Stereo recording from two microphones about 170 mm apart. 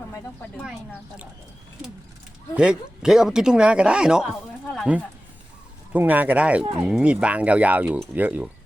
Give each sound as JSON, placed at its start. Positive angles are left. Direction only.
{"t": 0.6, "sound": "speech", "side_deg": -5}
{"t": 2.6, "sound": "speech", "side_deg": -5}
{"t": 4.6, "sound": "a sound", "side_deg": 0}
{"t": 5.9, "sound": "speech", "side_deg": -10}